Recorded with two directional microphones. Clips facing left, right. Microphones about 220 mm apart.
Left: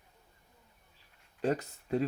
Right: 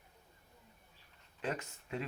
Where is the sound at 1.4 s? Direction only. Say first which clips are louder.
Left 8 dB; 40° left (ahead or behind).